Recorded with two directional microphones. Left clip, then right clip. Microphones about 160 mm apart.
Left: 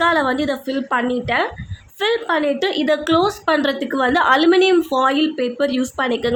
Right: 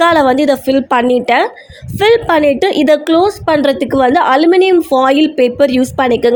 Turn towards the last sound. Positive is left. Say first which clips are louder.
# right 9 dB
turn(degrees=-35)  # may be behind; listen again after turning